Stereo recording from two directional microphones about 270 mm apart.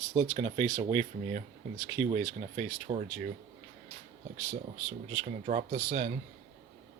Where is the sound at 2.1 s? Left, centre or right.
Right.